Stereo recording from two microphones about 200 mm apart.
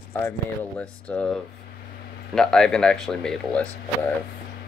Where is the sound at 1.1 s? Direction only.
10° left (ahead or behind).